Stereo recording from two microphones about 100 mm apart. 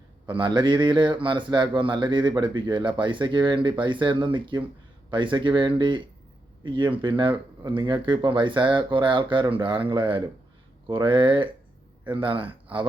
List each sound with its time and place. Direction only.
0.3 s a man's voice: 50° right (ahead or behind)